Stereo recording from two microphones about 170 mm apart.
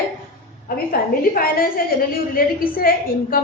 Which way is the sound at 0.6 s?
60° left (ahead or behind).